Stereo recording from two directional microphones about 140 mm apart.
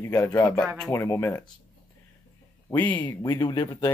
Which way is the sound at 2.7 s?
15° left (ahead or behind).